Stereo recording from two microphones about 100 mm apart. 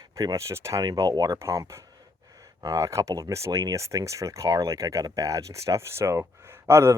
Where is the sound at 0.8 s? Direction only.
45° right (ahead or behind).